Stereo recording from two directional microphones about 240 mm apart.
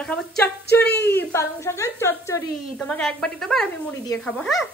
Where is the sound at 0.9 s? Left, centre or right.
Left.